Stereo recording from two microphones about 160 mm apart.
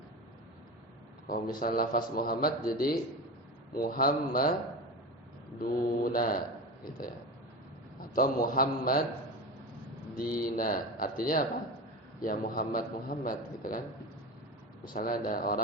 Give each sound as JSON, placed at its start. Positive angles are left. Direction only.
{"t": 1.5, "sound": "a man's voice", "side_deg": 65}
{"t": 5.5, "sound": "a man's voice", "side_deg": 65}
{"t": 8.1, "sound": "a man's voice", "side_deg": 60}
{"t": 10.2, "sound": "a man's voice", "side_deg": 65}
{"t": 14.9, "sound": "a man's voice", "side_deg": 65}